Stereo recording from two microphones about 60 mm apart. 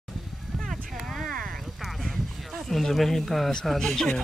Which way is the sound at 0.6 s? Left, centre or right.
Centre.